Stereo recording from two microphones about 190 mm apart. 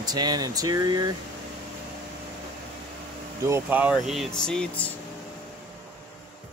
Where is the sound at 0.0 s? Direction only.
20° right (ahead or behind).